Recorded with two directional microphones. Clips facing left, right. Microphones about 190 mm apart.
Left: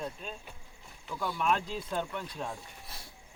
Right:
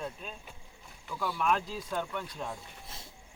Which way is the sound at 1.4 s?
5° right (ahead or behind).